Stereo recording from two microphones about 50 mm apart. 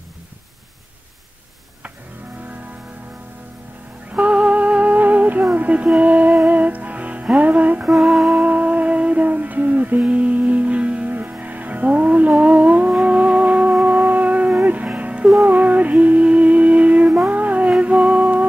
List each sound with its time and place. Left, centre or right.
4.1 s music: right
7.9 s music: centre
8.3 s music: right